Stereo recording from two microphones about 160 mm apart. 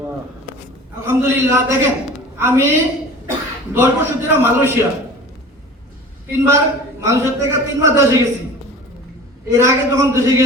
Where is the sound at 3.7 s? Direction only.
15° right (ahead or behind).